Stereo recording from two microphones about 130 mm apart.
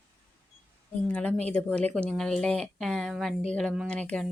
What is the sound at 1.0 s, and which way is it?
Speech, 10° left (ahead or behind).